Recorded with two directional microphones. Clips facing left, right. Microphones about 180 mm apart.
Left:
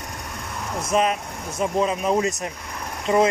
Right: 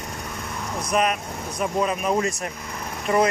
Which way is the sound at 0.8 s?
25° left (ahead or behind).